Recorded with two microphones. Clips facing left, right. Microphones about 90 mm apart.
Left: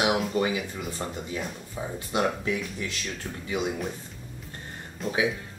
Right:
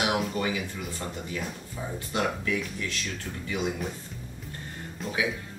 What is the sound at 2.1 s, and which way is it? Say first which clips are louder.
Speech: left 2 dB; 25° left (ahead or behind).